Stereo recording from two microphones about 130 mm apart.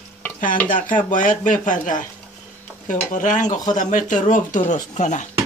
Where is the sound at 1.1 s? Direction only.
80° left.